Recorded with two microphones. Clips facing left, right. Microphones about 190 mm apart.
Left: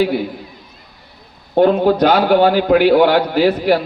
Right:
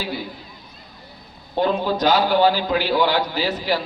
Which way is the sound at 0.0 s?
60° left (ahead or behind).